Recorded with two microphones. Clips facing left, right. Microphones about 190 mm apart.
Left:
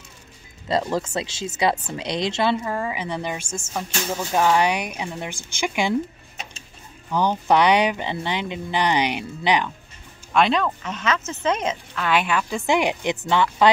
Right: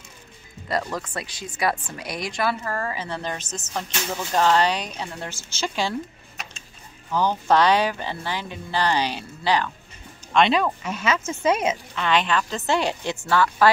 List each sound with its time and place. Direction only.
0.7 s a woman's voice: 25° left (ahead or behind)
2.6 s speech: 15° left (ahead or behind)
7.1 s speech: 15° left (ahead or behind)
10.5 s speech: 10° right (ahead or behind)
12.0 s a woman's voice: 10° left (ahead or behind)